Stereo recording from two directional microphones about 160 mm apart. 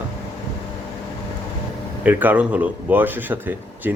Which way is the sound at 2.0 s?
10° right (ahead or behind).